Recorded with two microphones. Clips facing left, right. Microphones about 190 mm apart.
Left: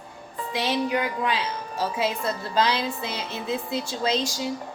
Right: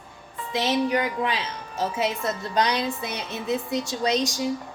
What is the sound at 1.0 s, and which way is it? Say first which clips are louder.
A woman's voice: even; 20° right (ahead or behind).